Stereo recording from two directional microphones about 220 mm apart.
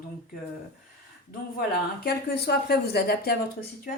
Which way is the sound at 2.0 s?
45° left (ahead or behind).